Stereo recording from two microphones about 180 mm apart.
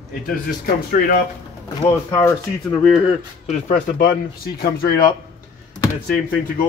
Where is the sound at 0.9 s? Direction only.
55° left (ahead or behind).